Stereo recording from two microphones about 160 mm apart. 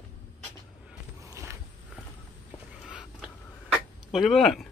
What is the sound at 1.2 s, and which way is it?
Walk, 20° right (ahead or behind).